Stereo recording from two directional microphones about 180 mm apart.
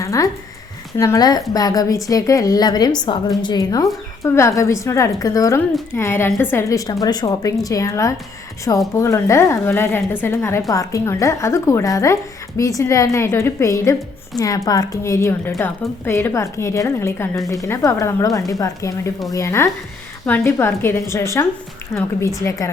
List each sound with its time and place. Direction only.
0.0 s a woman's voice: 15° left (ahead or behind)